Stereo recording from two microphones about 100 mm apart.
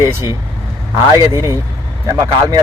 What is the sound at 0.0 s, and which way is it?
A man's voice, 25° right (ahead or behind).